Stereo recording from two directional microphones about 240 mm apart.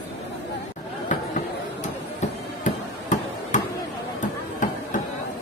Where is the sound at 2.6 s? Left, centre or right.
Left.